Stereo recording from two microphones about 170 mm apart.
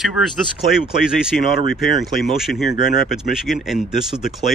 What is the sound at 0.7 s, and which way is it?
Speech, 5° right (ahead or behind).